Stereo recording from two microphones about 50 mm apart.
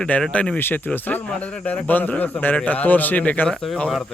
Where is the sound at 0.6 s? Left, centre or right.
Left.